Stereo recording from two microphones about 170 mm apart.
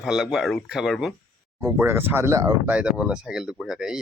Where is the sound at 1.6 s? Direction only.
20° right (ahead or behind).